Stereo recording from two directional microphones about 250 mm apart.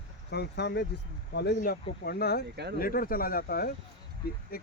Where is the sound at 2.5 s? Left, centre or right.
Right.